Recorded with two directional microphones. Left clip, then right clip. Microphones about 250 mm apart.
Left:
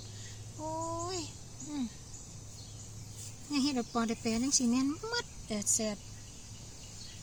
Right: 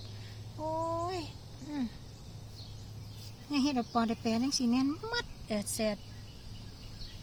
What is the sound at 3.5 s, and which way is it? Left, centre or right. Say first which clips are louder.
Speech: right 2 dB; centre.